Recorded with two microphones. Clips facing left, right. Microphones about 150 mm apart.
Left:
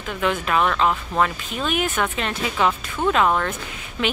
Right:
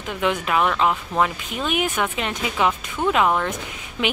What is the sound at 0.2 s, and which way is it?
Speech, 15° right (ahead or behind).